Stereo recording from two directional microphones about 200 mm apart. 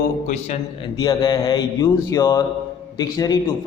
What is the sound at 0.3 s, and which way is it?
Speech, 35° left (ahead or behind).